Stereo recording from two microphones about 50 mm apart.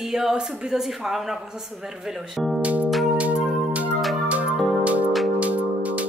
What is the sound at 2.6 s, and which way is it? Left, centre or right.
Music, right.